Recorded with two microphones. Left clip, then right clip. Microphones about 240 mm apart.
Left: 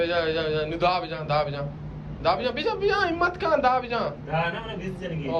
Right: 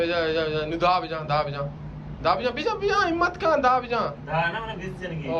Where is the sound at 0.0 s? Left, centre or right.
Centre.